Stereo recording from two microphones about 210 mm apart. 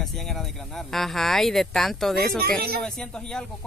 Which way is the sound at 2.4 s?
45° right (ahead or behind).